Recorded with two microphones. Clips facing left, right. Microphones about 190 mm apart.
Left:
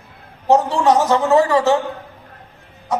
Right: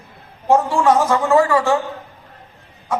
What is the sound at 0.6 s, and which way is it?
A man's voice, 20° left (ahead or behind).